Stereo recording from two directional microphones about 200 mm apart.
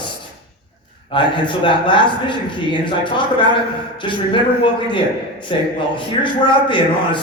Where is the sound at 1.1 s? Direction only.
25° left (ahead or behind).